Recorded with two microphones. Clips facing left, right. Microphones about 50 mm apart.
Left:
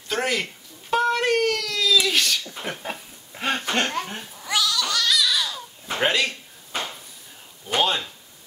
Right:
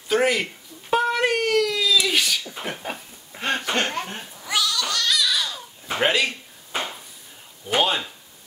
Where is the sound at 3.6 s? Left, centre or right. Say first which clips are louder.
Even; centre.